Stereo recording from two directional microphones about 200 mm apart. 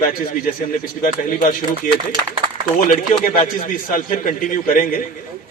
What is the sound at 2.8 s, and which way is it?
A man's voice, 40° left (ahead or behind).